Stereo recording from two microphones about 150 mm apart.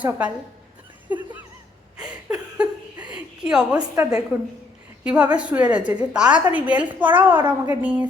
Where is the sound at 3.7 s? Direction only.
20° right (ahead or behind).